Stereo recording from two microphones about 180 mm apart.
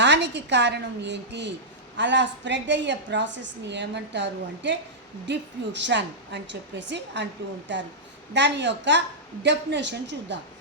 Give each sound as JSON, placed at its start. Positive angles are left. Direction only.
{"t": 0.0, "sound": "a woman's voice", "side_deg": -75}